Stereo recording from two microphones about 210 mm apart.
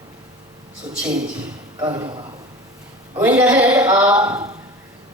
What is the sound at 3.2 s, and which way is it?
Speech, 5° right (ahead or behind).